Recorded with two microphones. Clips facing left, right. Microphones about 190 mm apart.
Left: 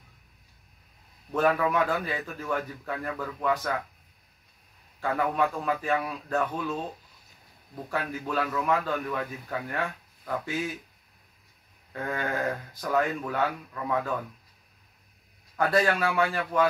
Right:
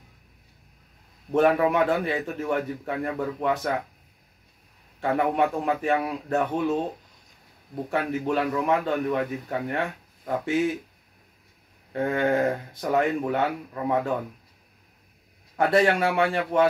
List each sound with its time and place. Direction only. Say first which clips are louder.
1.3 s a man's voice: right 4 dB; 25° right (ahead or behind)
5.0 s a man's voice: right 4 dB; 25° right (ahead or behind)
8.3 s a man's voice: right 3 dB; 25° right (ahead or behind)
11.9 s a man's voice: right 8 dB; 25° right (ahead or behind)
15.5 s a man's voice: right 4 dB; 25° right (ahead or behind)